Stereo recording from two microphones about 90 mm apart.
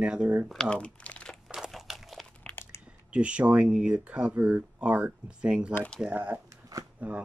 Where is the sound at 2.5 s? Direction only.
30° left (ahead or behind).